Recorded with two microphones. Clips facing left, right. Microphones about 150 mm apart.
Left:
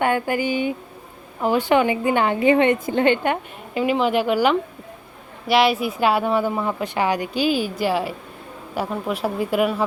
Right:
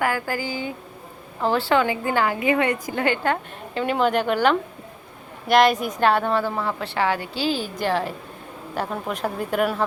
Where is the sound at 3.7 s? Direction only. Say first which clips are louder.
Left 2 dB; 10° left (ahead or behind).